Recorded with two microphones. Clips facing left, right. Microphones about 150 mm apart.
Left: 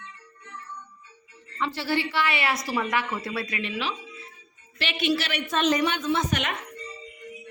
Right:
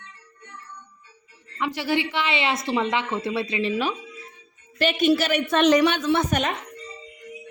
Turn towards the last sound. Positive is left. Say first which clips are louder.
# right 4 dB
turn(degrees=-45)  # may be behind; listen again after turning